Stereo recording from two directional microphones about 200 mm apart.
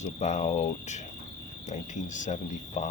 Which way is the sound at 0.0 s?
35° left (ahead or behind).